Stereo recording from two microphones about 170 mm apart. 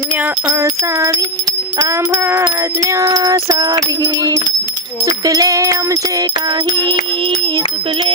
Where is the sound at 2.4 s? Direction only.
20° right (ahead or behind).